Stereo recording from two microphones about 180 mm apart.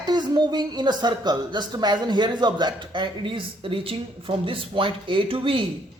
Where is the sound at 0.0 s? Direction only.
25° right (ahead or behind).